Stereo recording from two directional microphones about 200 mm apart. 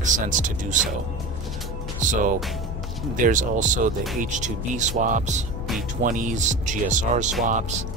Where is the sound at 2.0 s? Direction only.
40° right (ahead or behind).